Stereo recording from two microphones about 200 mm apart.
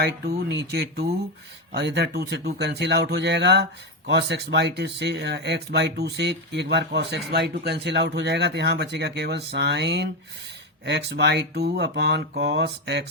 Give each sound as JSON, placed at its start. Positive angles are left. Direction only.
{"t": 0.0, "sound": "speech", "side_deg": -55}